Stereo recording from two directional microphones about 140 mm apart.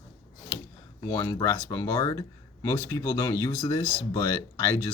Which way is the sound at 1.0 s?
25° left (ahead or behind).